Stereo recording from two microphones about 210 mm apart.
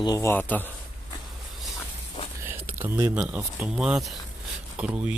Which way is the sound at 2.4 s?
10° right (ahead or behind).